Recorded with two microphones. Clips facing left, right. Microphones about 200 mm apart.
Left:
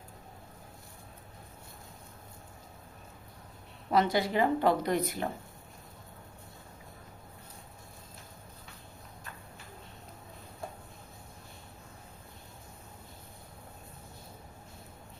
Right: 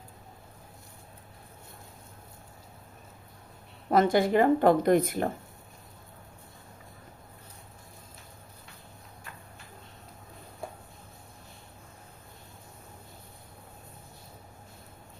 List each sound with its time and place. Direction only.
3.8 s speech: 50° right (ahead or behind)